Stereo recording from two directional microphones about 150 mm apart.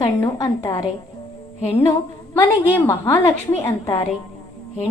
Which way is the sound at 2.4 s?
15° left (ahead or behind).